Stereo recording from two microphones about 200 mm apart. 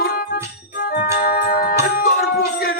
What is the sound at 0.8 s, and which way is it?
Organ, 45° left (ahead or behind).